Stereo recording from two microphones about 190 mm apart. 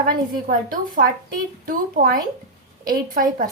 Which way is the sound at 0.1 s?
45° right (ahead or behind).